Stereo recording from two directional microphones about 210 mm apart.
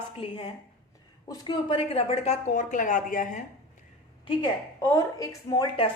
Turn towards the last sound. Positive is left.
turn(degrees=20)  # may be behind; listen again after turning